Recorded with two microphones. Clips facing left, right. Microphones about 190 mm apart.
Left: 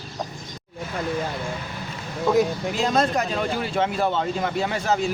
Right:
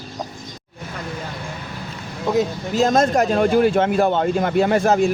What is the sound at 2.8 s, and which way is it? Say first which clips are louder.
A man's voice: right 7 dB; 45° right (ahead or behind).